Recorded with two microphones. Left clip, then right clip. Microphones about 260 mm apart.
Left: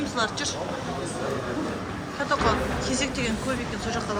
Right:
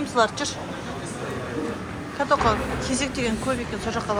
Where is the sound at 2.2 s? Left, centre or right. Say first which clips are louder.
Right 3 dB; centre.